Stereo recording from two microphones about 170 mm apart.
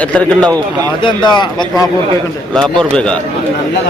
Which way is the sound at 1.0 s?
25° left (ahead or behind).